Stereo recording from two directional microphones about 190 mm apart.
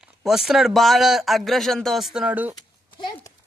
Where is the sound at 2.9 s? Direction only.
25° left (ahead or behind).